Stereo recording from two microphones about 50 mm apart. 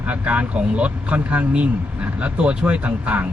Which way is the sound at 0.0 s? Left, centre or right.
Right.